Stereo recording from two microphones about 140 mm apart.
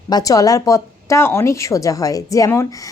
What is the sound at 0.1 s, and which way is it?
Speech, 25° left (ahead or behind).